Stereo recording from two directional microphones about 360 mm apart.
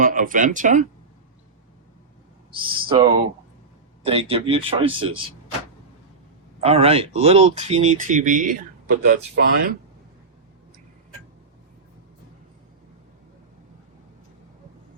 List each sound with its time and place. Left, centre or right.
0.0 s speech: right
2.6 s speech: centre
6.6 s speech: centre